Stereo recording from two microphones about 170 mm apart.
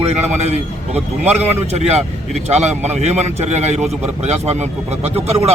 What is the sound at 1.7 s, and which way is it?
Speech, 40° right (ahead or behind).